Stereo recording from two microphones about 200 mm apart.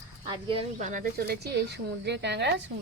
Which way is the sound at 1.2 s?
55° right (ahead or behind).